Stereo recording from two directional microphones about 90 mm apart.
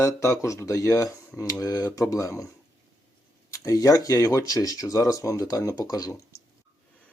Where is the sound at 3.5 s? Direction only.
40° left (ahead or behind).